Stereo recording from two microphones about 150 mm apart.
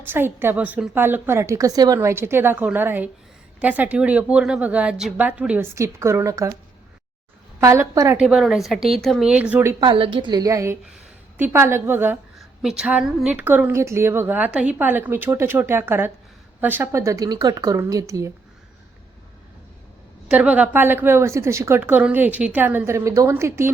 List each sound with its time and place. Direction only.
0.0 s a woman's voice: 15° right (ahead or behind)
7.6 s speech: 20° right (ahead or behind)
8.1 s a woman's voice: 5° right (ahead or behind)
9.8 s a woman's voice: 35° right (ahead or behind); by 12.1 s 15° right (ahead or behind)
12.4 s a woman's voice: 5° right (ahead or behind); by 18.3 s 20° right (ahead or behind)
20.3 s a woman's voice: 10° right (ahead or behind)